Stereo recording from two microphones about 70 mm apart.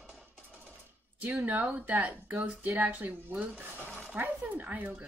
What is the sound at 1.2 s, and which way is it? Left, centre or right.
Speech, right.